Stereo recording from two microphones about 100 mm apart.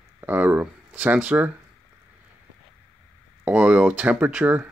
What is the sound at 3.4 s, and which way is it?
Speech, 10° right (ahead or behind).